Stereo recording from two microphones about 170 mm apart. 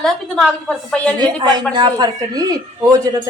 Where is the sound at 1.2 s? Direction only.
25° right (ahead or behind).